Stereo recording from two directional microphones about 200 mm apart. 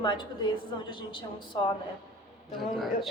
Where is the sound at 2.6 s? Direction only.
Centre (ahead or behind).